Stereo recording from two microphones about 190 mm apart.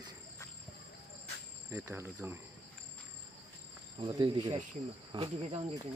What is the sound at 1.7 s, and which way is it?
Speech, 15° right (ahead or behind).